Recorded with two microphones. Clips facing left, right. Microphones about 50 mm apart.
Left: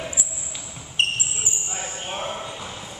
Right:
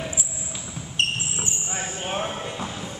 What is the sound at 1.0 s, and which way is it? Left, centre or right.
Basketball bounce, left.